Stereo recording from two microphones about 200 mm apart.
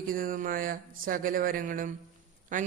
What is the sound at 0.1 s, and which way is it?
A man's voice, 45° right (ahead or behind).